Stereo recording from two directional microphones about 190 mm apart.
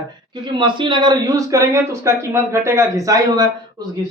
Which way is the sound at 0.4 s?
25° right (ahead or behind).